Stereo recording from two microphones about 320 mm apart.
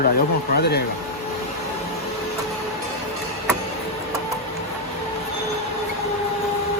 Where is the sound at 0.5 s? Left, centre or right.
Left.